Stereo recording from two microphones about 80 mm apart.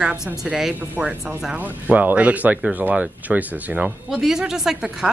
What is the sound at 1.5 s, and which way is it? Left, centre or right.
Speech, centre.